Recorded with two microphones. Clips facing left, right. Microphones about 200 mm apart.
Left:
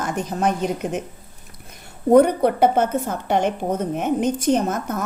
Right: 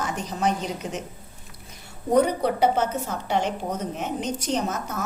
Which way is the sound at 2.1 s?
55° left (ahead or behind).